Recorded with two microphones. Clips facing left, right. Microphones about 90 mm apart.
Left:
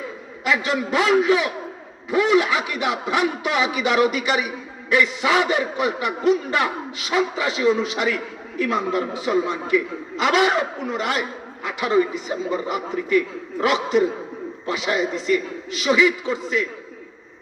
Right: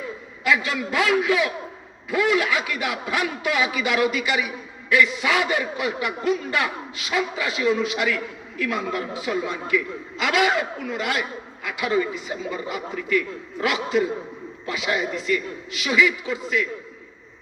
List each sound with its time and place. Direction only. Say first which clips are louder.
0.4 s a man's voice: left 1 dB; 25° left (ahead or behind)
13.1 s a man's voice: left 3 dB; 25° left (ahead or behind)